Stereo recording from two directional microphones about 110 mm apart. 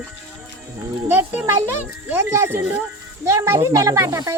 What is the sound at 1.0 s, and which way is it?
Speech, 15° right (ahead or behind).